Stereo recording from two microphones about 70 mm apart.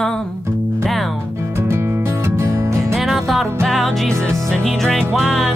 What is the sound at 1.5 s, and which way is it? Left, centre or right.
Music, right.